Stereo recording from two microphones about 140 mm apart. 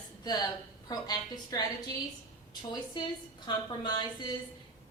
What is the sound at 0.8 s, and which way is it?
A woman's voice, 30° left (ahead or behind).